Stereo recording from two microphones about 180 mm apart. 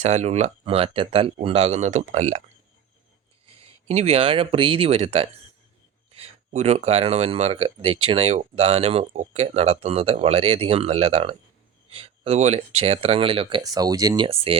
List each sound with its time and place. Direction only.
0.0 s speech: 40° right (ahead or behind)
3.4 s a sound: 30° right (ahead or behind)
3.8 s speech: 35° right (ahead or behind); by 14.3 s 20° right (ahead or behind)
14.3 s speech: 30° right (ahead or behind)